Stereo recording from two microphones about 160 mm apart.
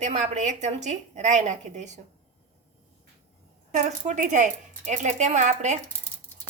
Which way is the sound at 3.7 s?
50° right (ahead or behind).